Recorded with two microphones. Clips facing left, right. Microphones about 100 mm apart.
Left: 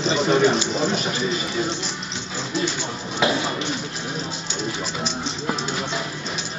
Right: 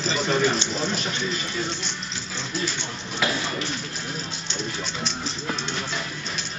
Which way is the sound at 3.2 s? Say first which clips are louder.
Left 5 dB; 30° left (ahead or behind).